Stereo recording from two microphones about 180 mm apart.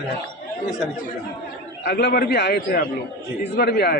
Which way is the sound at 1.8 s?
65° left (ahead or behind).